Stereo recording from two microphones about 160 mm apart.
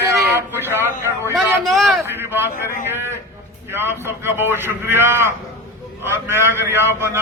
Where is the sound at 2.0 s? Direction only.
15° right (ahead or behind).